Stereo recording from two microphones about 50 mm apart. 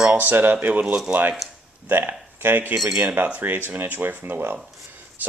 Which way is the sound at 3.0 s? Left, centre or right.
Right.